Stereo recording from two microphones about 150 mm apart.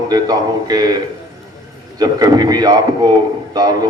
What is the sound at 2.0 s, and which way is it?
A man's voice, 25° right (ahead or behind).